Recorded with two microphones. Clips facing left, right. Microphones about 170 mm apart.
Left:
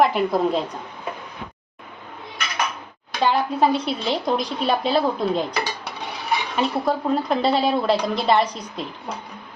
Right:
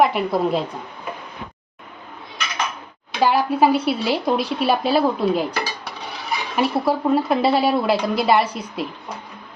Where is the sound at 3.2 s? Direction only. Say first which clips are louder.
Right 3 dB; 5° right (ahead or behind).